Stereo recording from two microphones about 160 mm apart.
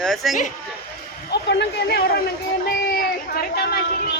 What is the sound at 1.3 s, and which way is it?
Speech, 90° left.